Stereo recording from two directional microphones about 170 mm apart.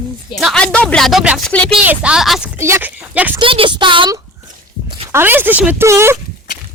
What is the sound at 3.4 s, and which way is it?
Speech, 30° right (ahead or behind).